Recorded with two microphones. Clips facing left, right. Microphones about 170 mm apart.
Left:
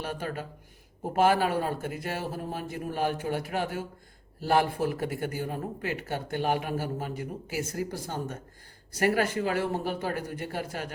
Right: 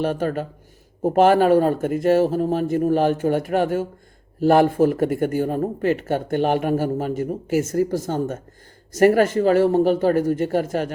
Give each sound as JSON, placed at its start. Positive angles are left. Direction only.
{"t": 0.0, "sound": "a man's voice", "side_deg": -50}